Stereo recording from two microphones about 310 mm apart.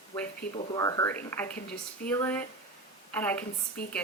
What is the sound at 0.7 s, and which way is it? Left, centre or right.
A woman's voice, centre.